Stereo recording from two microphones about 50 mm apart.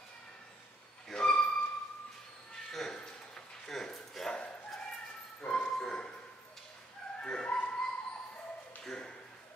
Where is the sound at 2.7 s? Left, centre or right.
Centre.